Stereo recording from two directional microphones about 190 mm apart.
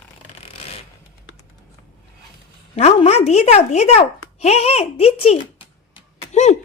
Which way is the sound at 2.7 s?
30° left (ahead or behind).